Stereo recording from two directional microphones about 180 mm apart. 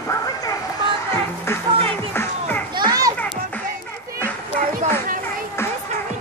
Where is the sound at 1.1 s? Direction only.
15° left (ahead or behind).